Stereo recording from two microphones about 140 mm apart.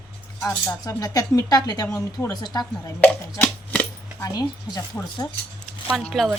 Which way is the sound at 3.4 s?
5° left (ahead or behind).